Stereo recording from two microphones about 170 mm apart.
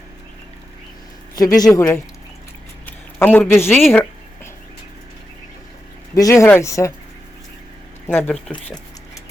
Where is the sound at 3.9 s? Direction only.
15° left (ahead or behind).